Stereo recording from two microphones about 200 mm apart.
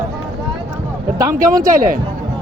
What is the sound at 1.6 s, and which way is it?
Speech, 45° right (ahead or behind).